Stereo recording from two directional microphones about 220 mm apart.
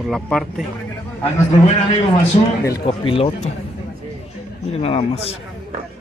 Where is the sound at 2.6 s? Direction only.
20° left (ahead or behind).